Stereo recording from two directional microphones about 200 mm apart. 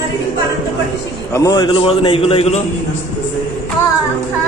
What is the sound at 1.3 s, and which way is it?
A man's voice, 20° left (ahead or behind).